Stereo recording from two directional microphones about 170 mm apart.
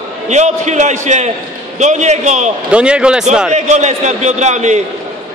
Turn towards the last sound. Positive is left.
turn(degrees=-45)  # may be behind; listen again after turning